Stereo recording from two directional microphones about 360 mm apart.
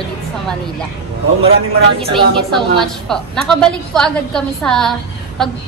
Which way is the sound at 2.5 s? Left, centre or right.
Centre.